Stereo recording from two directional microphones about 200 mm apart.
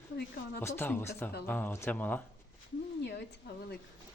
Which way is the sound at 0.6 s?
10° left (ahead or behind).